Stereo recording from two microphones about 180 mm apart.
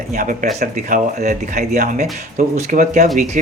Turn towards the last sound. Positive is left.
turn(degrees=-45)  # may be behind; listen again after turning